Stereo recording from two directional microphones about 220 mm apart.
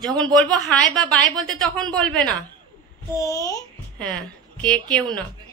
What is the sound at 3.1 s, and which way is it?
A child's voice, 15° left (ahead or behind).